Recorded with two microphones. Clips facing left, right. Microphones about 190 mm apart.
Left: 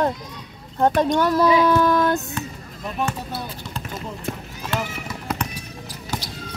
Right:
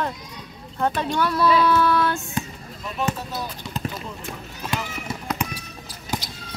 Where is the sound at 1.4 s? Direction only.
15° left (ahead or behind).